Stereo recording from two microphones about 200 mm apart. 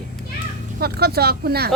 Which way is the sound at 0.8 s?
50° right (ahead or behind).